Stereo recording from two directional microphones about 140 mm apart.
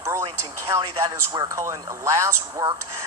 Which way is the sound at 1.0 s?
25° right (ahead or behind).